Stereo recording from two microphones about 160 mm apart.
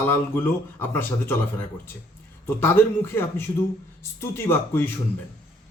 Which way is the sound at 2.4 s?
15° left (ahead or behind).